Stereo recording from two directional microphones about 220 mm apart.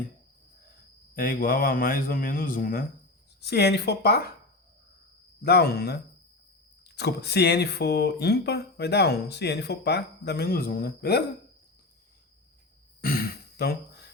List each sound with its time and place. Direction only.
1.1 s a man's voice: 40° left (ahead or behind)
5.4 s speech: 45° left (ahead or behind)
13.0 s throat clearing: 45° left (ahead or behind)